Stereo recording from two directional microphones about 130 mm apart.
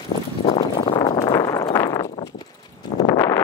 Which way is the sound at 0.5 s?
35° left (ahead or behind).